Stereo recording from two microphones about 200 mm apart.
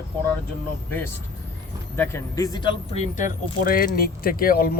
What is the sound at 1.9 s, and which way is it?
Speech, 10° left (ahead or behind).